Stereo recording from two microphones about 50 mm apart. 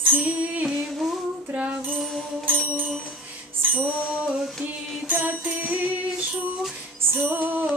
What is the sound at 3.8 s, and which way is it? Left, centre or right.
Music, right.